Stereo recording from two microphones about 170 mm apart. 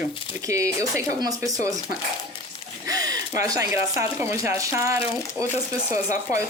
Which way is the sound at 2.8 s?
20° right (ahead or behind).